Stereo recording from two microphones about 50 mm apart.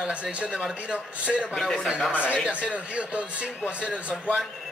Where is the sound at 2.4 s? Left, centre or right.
Right.